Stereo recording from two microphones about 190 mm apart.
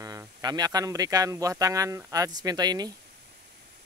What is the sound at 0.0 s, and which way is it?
Speech, 20° right (ahead or behind).